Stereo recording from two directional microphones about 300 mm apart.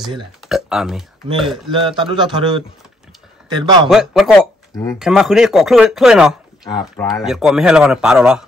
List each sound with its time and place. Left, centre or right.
0.4 s speech: centre
1.7 s a man's voice: centre
3.9 s speech: centre